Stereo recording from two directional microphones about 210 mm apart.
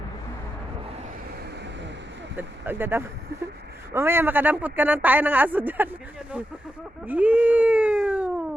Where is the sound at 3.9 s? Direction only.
10° right (ahead or behind).